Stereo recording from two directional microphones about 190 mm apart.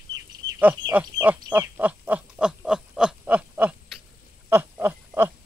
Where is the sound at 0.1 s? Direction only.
75° right (ahead or behind).